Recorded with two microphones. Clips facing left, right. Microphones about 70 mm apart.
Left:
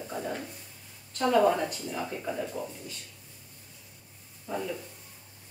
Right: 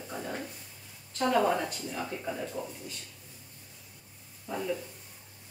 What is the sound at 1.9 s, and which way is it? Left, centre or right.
Speech, centre.